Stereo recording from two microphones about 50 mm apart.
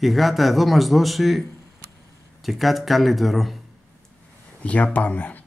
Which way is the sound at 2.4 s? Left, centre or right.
Centre.